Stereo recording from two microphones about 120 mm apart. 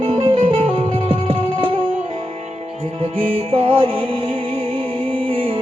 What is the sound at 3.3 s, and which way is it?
Music, 50° right (ahead or behind).